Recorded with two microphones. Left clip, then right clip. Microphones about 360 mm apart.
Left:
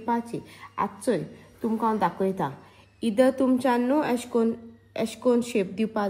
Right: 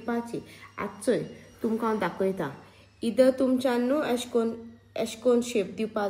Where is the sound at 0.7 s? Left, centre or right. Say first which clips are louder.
Left 2 dB; centre.